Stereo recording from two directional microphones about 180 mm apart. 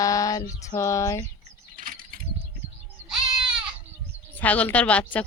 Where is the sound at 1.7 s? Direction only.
50° right (ahead or behind).